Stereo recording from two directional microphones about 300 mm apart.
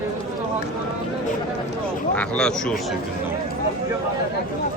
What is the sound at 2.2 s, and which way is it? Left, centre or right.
Speech, centre.